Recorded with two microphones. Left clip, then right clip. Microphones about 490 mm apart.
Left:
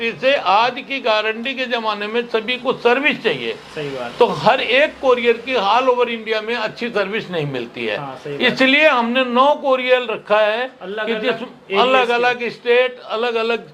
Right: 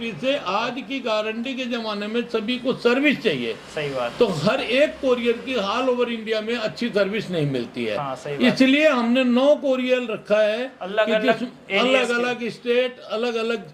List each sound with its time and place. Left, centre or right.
0.0 s a man's voice: left
11.0 s a man's voice: right
11.8 s a man's voice: left